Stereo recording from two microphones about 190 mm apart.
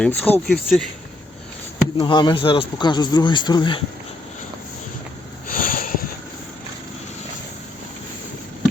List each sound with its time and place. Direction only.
0.0 s speech: 10° left (ahead or behind)
2.0 s speech: 25° left (ahead or behind)
5.5 s sniff: 50° left (ahead or behind)